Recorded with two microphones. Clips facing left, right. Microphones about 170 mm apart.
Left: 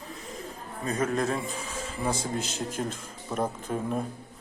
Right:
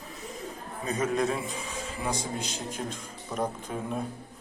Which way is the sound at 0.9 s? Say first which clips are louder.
Even; centre (ahead or behind).